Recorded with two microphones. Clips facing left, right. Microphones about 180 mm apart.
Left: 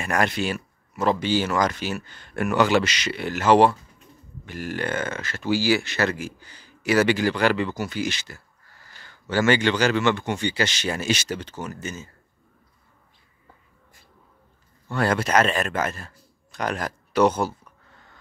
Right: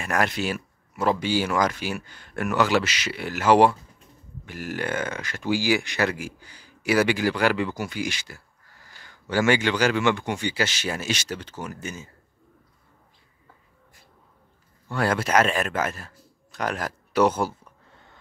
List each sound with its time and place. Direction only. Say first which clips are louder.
0.0 s speech: left 1 dB; centre (ahead or behind)
14.9 s speech: left 1 dB; 5° right (ahead or behind)
17.6 s a sound: right 1 dB; 25° right (ahead or behind)